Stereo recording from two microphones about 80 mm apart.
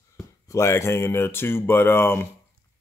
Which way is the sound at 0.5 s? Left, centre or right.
Left.